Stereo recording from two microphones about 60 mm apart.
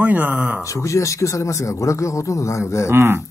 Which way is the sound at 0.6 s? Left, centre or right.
Left.